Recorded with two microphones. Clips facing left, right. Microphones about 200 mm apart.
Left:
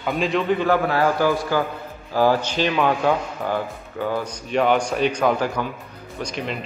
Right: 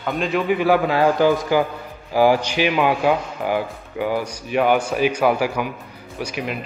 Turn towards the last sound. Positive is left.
turn(degrees=-5)  # may be behind; listen again after turning